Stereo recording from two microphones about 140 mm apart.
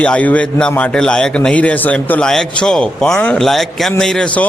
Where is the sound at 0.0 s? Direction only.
10° left (ahead or behind).